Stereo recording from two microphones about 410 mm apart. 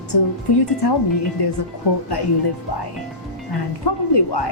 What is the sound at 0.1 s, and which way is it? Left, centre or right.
Speech, left.